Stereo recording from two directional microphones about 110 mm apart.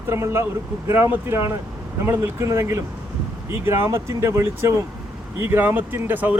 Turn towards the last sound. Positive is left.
turn(degrees=-15)  # may be behind; listen again after turning